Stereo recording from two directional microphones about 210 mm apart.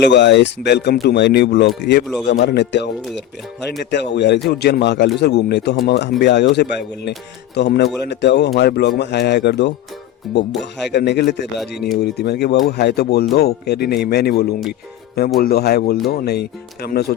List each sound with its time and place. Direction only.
0.0 s speech: 55° left (ahead or behind)
3.9 s speech: 55° left (ahead or behind)
10.3 s speech: centre (ahead or behind)
10.6 s speech: 55° left (ahead or behind)